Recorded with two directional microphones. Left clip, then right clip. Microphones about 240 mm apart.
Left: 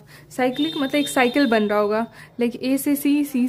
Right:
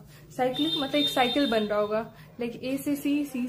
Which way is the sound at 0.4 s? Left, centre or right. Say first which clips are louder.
Left 5 dB; left.